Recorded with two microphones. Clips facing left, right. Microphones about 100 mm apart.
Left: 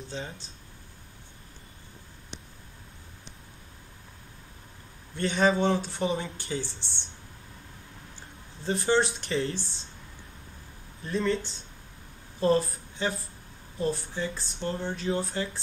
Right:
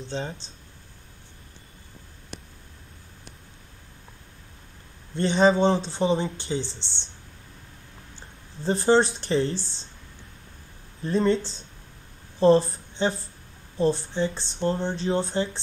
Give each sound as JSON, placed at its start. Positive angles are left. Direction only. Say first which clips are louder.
{"t": 0.0, "sound": "speech", "louder": "right 5 dB", "side_deg": -30}
{"t": 5.1, "sound": "speech", "louder": "right 5 dB", "side_deg": -25}
{"t": 8.6, "sound": "speech", "louder": "right 5 dB", "side_deg": -35}
{"t": 11.1, "sound": "a woman's voice", "louder": "right 5 dB", "side_deg": -30}